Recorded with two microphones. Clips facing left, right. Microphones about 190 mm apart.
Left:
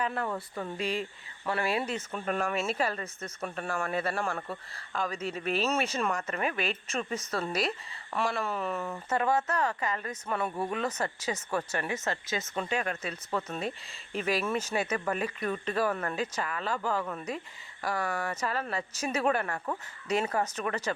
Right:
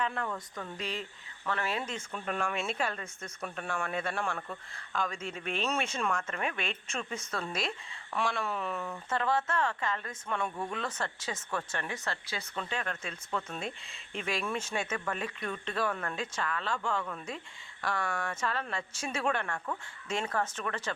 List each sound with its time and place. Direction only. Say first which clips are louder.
0.0 s speech: left 2 dB; 5° left (ahead or behind)
8.9 s speech: left 3 dB; 15° left (ahead or behind)
20.4 s speech: left 3 dB; 15° left (ahead or behind)